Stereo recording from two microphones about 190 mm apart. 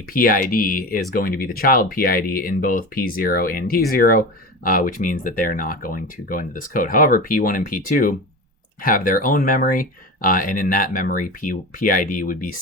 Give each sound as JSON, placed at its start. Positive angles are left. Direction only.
{"t": 0.1, "sound": "speech", "side_deg": 45}